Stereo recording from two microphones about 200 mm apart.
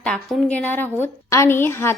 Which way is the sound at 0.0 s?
5° left (ahead or behind).